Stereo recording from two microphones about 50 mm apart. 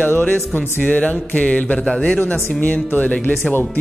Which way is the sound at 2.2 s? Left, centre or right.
Left.